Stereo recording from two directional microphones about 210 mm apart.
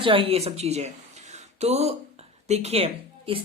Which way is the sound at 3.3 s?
25° right (ahead or behind).